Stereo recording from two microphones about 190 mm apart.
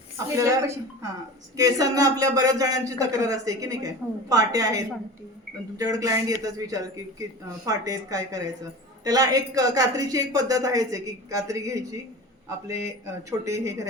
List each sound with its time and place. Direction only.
0.3 s a woman's voice: 15° right (ahead or behind)
13.1 s a woman's voice: 15° right (ahead or behind)